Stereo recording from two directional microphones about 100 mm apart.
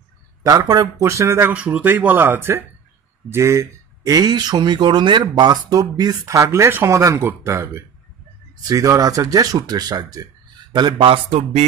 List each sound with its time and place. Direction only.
0.4 s speech: 40° right (ahead or behind)
1.5 s a man's voice: 15° right (ahead or behind); by 11.1 s 50° right (ahead or behind)